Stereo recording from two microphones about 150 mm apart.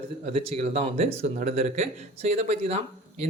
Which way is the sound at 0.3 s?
45° right (ahead or behind).